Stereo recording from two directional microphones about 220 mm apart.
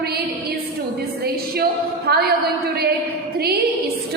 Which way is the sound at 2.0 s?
45° right (ahead or behind).